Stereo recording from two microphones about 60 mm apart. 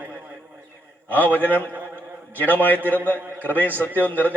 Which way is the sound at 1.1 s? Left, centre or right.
Left.